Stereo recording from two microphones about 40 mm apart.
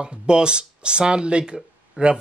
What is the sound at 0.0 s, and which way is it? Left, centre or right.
Speech, right.